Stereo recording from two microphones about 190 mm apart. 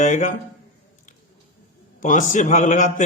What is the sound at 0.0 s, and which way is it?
Speech, 40° left (ahead or behind).